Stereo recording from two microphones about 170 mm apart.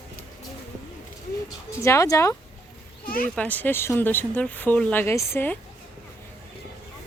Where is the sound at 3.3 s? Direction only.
10° left (ahead or behind).